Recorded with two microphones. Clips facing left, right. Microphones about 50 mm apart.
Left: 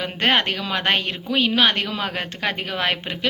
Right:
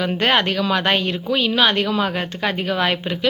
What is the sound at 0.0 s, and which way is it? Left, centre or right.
Speech, left.